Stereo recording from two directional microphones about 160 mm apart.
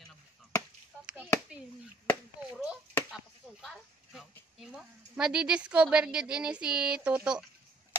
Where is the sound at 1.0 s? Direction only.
5° right (ahead or behind).